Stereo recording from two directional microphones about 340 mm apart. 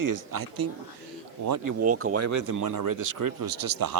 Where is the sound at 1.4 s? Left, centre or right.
Right.